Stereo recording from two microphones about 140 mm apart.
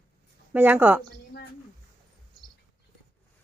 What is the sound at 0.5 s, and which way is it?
Speech, 15° right (ahead or behind).